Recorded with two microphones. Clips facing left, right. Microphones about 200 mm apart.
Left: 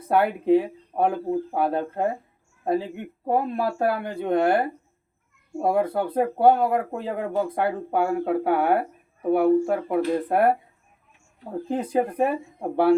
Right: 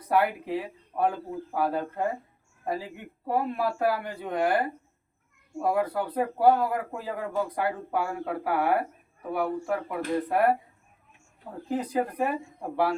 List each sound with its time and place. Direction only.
0.1 s speech: 25° left (ahead or behind)
11.7 s speech: 25° left (ahead or behind)